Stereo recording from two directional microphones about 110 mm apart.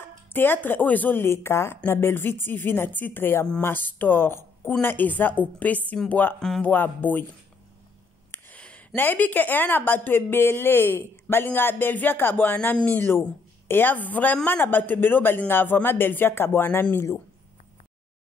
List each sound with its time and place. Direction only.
0.0 s speech: 20° left (ahead or behind)
6.4 s speech: 5° left (ahead or behind)
6.7 s speech: 15° left (ahead or behind)
8.3 s speech: 15° left (ahead or behind)